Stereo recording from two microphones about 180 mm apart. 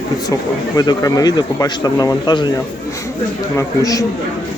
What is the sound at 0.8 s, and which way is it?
Speech, 20° left (ahead or behind).